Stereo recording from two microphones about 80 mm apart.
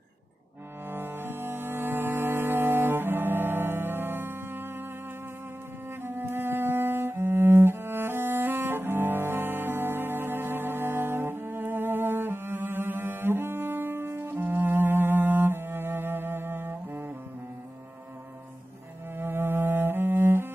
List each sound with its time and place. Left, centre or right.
0.8 s music: right
6.0 s cello: right
19.1 s cello: right